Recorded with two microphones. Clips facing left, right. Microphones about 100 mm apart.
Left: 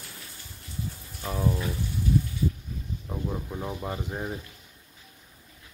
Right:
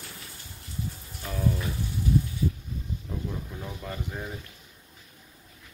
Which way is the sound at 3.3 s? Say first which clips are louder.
Left 4 dB; 25° left (ahead or behind).